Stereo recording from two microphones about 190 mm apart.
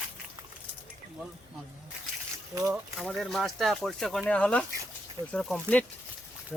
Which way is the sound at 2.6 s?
Centre (ahead or behind).